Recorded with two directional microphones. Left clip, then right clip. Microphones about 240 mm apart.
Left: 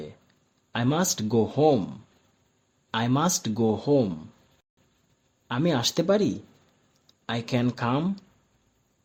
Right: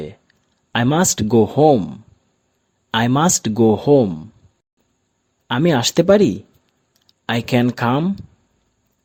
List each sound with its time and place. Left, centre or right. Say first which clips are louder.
0.0 s speech: right 9 dB; right
5.5 s speech: right 8 dB; right